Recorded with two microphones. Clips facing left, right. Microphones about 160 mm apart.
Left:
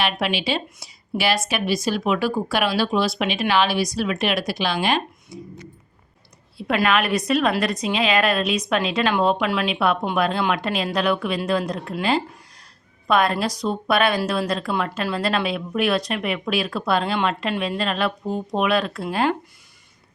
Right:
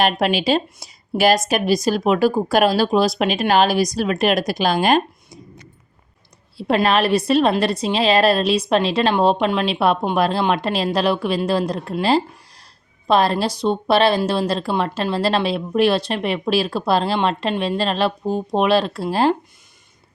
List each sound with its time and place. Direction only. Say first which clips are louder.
0.0 s speech: right 5 dB; 45° right (ahead or behind)
6.6 s speech: right 3 dB; 35° right (ahead or behind)